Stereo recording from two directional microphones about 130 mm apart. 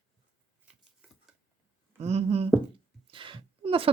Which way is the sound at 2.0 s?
55° right (ahead or behind).